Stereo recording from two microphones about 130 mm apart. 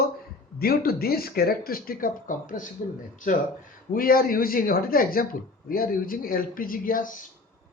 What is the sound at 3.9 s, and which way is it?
Speech, 90° left.